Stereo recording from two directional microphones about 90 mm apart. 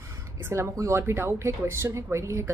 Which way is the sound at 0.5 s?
35° right (ahead or behind).